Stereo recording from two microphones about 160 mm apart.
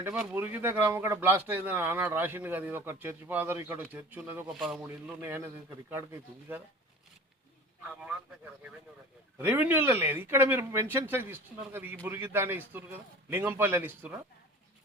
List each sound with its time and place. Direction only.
0.0 s speech: 5° right (ahead or behind)
5.2 s speech: 15° right (ahead or behind)
9.4 s speech: 10° right (ahead or behind)